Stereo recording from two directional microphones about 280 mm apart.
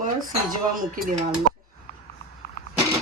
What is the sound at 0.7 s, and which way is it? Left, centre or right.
Speech, right.